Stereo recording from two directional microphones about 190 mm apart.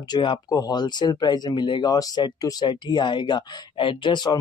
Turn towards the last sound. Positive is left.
turn(degrees=25)  # may be behind; listen again after turning